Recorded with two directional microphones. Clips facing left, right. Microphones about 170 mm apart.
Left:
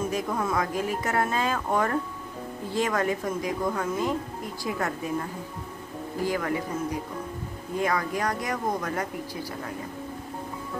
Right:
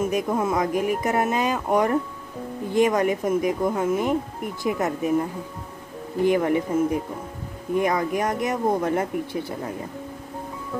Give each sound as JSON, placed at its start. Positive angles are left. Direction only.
{"t": 0.0, "sound": "speech", "side_deg": -20}